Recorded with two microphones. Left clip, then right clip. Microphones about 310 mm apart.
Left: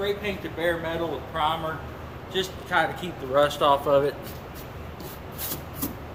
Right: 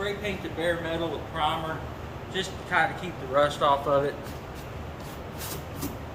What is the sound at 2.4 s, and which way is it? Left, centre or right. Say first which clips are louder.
Speech: left 1 dB; left.